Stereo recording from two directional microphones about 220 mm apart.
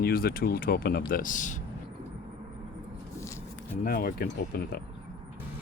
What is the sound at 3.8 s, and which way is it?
Speech, 40° left (ahead or behind).